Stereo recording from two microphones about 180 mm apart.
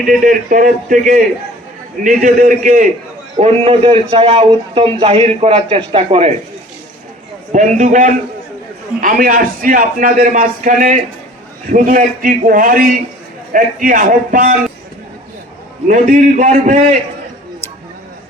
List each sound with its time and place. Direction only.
0.2 s a man's voice: 50° right (ahead or behind)
3.3 s a man's voice: 35° right (ahead or behind)
7.5 s a man's voice: 45° right (ahead or behind)
15.9 s a man's voice: 45° right (ahead or behind)